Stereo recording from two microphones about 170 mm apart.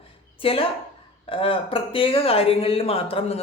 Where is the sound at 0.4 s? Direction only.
30° left (ahead or behind).